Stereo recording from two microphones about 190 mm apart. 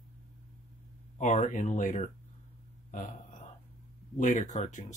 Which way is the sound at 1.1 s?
40° left (ahead or behind).